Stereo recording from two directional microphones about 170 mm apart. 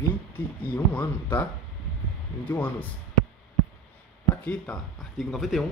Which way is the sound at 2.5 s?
10° left (ahead or behind).